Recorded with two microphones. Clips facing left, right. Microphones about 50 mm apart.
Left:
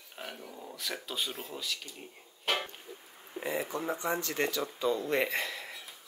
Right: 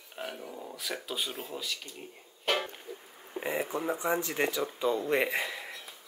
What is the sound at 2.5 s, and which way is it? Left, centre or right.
Music, centre.